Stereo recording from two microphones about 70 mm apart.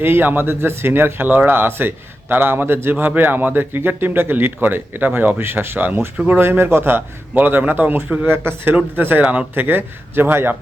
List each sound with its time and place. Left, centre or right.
0.0 s a man's voice: right